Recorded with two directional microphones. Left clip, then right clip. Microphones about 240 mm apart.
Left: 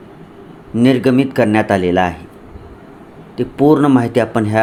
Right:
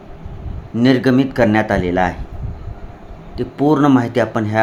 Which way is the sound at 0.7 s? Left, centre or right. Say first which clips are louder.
Left 1 dB; centre.